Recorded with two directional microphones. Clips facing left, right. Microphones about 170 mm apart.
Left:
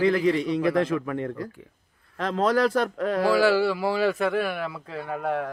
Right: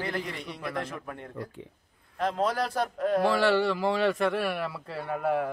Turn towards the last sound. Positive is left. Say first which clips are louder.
# even
turn(degrees=0)  # may be behind; listen again after turning